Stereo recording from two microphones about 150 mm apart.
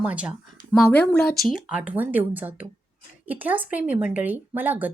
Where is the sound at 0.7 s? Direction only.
10° left (ahead or behind); by 4.9 s 10° right (ahead or behind).